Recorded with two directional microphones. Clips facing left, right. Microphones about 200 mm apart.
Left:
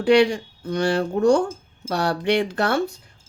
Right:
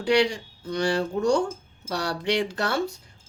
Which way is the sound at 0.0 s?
55° left (ahead or behind).